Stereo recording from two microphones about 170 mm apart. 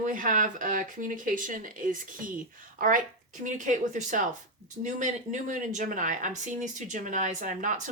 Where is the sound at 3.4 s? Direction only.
50° right (ahead or behind).